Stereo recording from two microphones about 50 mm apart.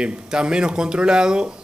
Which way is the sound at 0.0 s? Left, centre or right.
Centre.